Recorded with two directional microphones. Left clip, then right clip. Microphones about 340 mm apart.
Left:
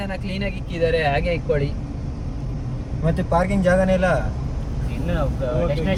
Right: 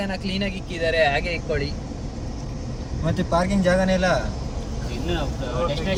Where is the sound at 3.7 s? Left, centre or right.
Centre.